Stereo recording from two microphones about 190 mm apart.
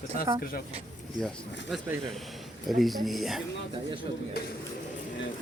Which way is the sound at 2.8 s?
Centre (ahead or behind).